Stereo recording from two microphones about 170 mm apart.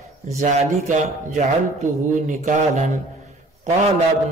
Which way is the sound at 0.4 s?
45° right (ahead or behind).